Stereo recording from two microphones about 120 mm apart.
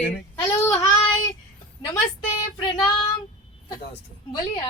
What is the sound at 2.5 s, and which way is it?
Child singing, 40° left (ahead or behind).